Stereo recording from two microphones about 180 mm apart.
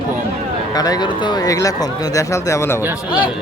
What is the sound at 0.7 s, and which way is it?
A man's voice, 20° left (ahead or behind).